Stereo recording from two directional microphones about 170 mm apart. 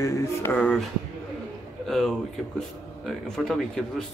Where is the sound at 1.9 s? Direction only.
Centre (ahead or behind).